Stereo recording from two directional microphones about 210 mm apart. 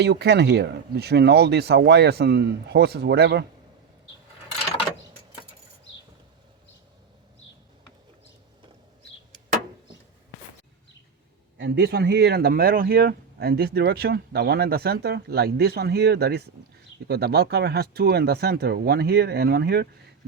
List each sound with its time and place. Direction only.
0.0 s speech: 50° right (ahead or behind)
11.5 s speech: 55° right (ahead or behind)